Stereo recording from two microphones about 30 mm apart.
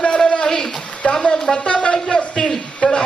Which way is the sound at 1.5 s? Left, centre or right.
Left.